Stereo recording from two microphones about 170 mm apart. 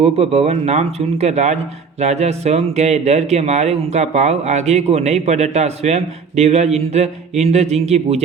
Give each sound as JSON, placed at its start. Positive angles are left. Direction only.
{"t": 0.0, "sound": "speech", "side_deg": -35}